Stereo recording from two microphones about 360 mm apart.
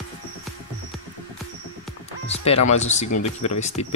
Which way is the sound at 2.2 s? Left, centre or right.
Centre.